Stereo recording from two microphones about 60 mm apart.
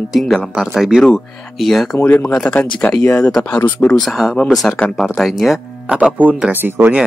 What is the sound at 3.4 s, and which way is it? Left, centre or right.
Speech, left.